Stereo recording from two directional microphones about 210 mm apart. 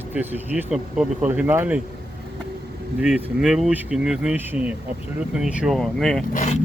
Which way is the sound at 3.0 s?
5° right (ahead or behind).